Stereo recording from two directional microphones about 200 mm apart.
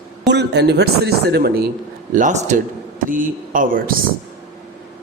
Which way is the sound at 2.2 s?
40° right (ahead or behind).